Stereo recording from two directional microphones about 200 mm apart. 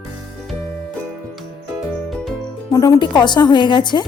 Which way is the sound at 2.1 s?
Centre (ahead or behind).